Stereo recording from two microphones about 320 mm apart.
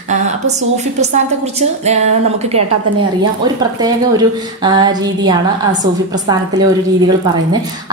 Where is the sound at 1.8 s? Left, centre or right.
Right.